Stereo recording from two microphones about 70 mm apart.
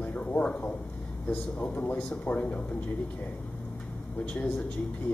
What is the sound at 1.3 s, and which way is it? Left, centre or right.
A man's voice, left.